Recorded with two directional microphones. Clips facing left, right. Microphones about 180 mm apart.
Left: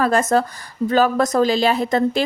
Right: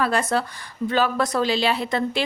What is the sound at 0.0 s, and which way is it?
A woman's voice, 45° left (ahead or behind).